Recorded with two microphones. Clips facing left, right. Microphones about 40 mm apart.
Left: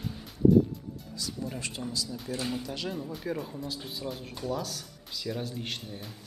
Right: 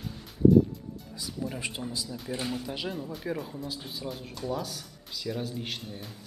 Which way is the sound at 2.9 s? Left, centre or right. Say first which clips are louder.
Even; centre.